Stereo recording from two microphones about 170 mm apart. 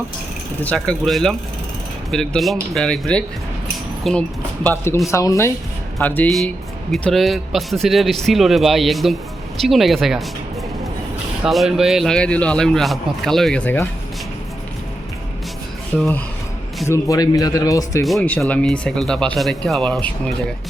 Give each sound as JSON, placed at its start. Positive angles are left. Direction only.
{"t": 0.6, "sound": "a man's voice", "side_deg": 5}
{"t": 5.0, "sound": "a man's voice", "side_deg": 20}
{"t": 11.4, "sound": "a man's voice", "side_deg": 0}
{"t": 15.9, "sound": "a man's voice", "side_deg": 5}
{"t": 16.9, "sound": "speech", "side_deg": 20}
{"t": 18.0, "sound": "a man's voice", "side_deg": 5}